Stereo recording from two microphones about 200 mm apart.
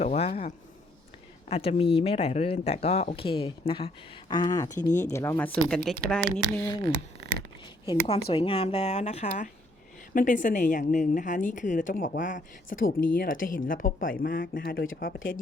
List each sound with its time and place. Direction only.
0.0 s a sound: 35° left (ahead or behind)
1.5 s speech: 30° left (ahead or behind)
4.8 s a woman's voice: 40° left (ahead or behind)
5.1 s speech: 15° left (ahead or behind)
8.3 s a woman's voice: 25° left (ahead or behind); by 15.4 s 45° left (ahead or behind)